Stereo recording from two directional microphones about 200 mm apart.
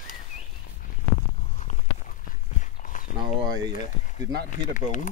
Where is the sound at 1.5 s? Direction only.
35° left (ahead or behind).